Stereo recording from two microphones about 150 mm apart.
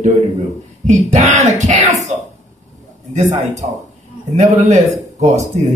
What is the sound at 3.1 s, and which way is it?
Speech, 55° right (ahead or behind).